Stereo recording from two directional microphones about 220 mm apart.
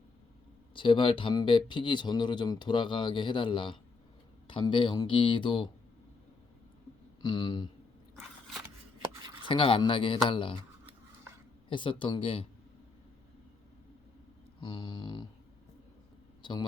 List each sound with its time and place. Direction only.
0.7 s speech: 25° left (ahead or behind)
7.2 s speech: 20° left (ahead or behind)
9.4 s speech: 25° left (ahead or behind)
11.7 s speech: 20° left (ahead or behind)
14.6 s speech: 20° left (ahead or behind)
16.4 s speech: 20° left (ahead or behind)